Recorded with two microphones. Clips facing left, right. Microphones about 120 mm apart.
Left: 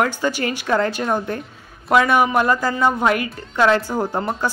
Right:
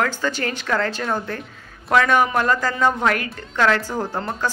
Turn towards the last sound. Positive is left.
turn(degrees=10)  # may be behind; listen again after turning